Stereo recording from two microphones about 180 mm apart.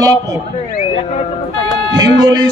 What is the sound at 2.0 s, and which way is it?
Speech, 20° right (ahead or behind).